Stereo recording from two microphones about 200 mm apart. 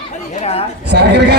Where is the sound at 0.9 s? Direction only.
55° right (ahead or behind).